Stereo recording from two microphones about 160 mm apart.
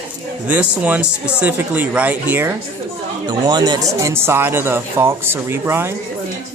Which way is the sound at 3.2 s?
25° right (ahead or behind).